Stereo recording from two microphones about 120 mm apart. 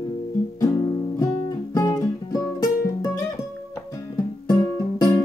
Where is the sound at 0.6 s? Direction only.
30° left (ahead or behind).